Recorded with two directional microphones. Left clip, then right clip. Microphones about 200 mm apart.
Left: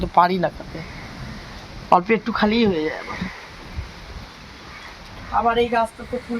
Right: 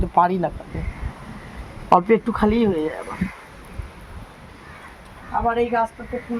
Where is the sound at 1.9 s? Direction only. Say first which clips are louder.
Right 1 dB; 20° right (ahead or behind).